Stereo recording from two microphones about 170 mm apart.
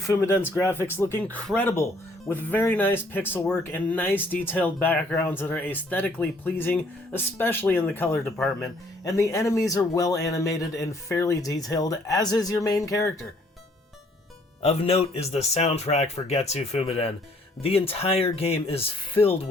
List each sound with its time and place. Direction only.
0.1 s speech: 15° left (ahead or behind)
8.2 s speech: centre (ahead or behind)
8.6 s speech: 20° left (ahead or behind)
14.6 s speech: 35° left (ahead or behind)